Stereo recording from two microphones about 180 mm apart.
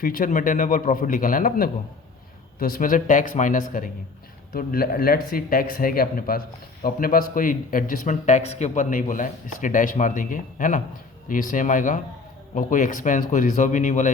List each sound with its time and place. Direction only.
0.0 s speech: 50° left (ahead or behind)